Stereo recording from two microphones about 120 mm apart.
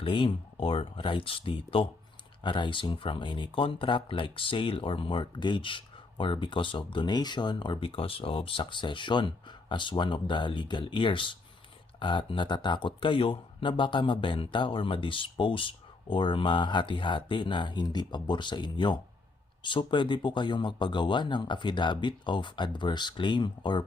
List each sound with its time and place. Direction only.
0.0 s speech: 45° left (ahead or behind)